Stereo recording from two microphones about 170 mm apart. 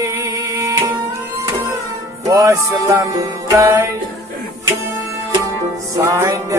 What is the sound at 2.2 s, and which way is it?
Music, 20° right (ahead or behind).